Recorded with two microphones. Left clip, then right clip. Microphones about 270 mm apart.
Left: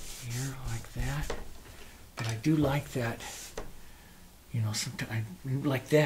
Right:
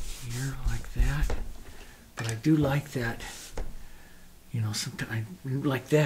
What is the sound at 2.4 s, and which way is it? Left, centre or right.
Speech, right.